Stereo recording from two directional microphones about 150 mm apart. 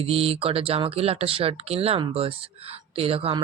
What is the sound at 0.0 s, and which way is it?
Speech, 40° right (ahead or behind).